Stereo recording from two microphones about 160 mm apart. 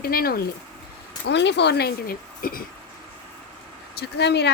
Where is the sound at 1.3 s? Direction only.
90° left; by 2.6 s 65° left (ahead or behind).